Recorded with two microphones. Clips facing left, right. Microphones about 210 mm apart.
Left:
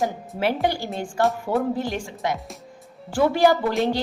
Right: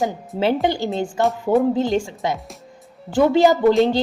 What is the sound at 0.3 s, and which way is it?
A woman's voice, 25° right (ahead or behind).